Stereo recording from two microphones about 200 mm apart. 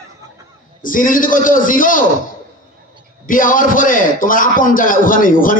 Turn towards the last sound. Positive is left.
turn(degrees=45)  # may be behind; listen again after turning